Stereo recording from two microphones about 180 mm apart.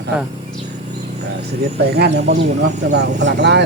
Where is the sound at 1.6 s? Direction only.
65° right (ahead or behind).